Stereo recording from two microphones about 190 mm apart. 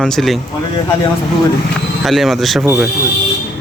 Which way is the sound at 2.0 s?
Centre (ahead or behind).